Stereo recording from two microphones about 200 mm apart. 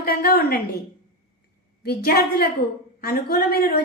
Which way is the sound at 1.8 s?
50° left (ahead or behind).